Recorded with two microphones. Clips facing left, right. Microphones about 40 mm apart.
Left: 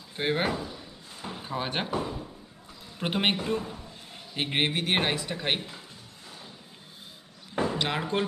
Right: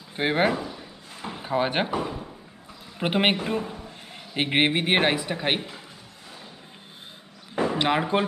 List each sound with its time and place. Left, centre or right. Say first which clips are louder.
0.1 s speech: right 5 dB; centre
7.5 s a sound: right 3 dB; right
7.8 s speech: right 5 dB; centre